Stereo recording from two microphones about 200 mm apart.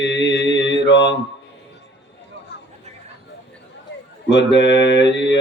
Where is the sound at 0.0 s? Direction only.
60° left (ahead or behind).